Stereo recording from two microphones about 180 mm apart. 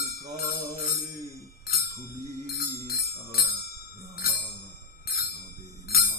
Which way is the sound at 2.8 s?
60° left (ahead or behind).